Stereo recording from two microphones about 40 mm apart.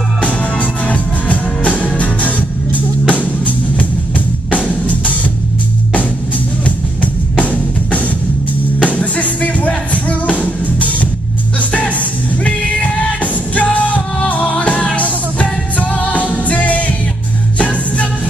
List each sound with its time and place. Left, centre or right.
0.4 s music: left
6.6 s music: left
13.2 s music: left